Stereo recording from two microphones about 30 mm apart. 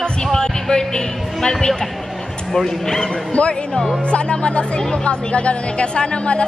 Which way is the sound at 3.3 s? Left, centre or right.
Left.